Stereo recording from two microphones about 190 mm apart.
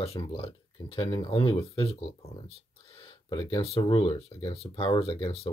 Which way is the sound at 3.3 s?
25° left (ahead or behind).